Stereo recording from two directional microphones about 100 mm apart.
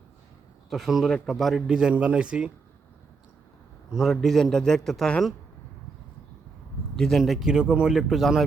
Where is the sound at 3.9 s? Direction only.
Centre (ahead or behind).